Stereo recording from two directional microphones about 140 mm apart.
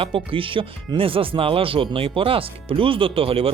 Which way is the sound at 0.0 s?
40° right (ahead or behind).